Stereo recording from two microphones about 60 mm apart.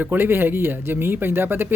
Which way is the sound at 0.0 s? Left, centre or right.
Right.